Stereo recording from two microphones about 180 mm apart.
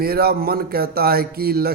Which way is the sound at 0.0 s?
60° right (ahead or behind).